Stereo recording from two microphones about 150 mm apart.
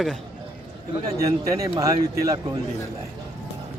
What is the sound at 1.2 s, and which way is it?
Speech, 20° right (ahead or behind).